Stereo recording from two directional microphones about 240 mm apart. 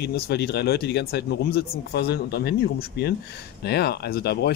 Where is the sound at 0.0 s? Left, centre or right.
Left.